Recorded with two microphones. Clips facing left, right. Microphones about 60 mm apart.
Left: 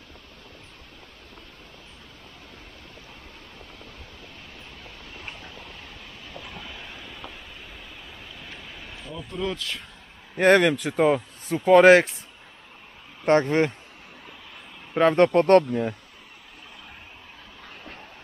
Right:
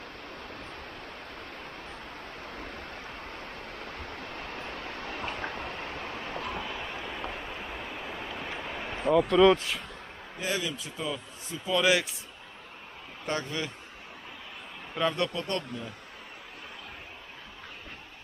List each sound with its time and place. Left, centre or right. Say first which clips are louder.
2.5 s a sound: right 6 dB; right
6.8 s a sound: right 4 dB; right
7.1 s vehicle: right 5 dB; right
9.2 s speech: right 9 dB; right
10.3 s speech: left 15 dB; left
13.2 s speech: left 13 dB; left
15.0 s speech: left 11 dB; left